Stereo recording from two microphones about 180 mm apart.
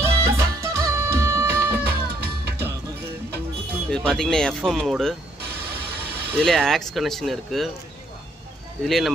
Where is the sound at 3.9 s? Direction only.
5° left (ahead or behind).